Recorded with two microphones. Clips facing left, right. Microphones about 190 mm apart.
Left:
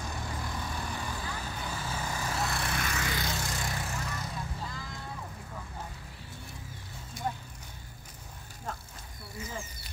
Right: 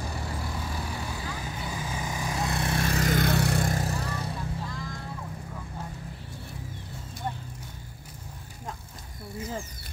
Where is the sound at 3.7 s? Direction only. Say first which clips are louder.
Right 6 dB; 35° right (ahead or behind).